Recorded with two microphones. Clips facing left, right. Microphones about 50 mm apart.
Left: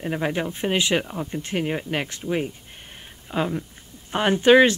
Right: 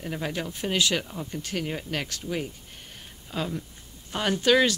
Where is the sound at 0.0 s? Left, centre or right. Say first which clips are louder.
Left 6 dB; left.